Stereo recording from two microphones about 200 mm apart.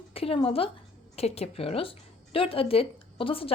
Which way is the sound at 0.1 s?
30° left (ahead or behind).